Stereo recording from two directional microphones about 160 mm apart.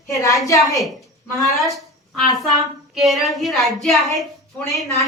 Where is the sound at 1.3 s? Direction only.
Centre (ahead or behind).